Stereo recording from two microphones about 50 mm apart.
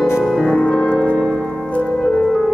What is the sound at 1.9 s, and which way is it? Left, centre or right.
Music, centre.